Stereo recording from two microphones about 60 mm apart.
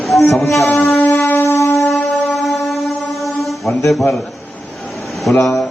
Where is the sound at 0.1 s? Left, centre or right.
Centre.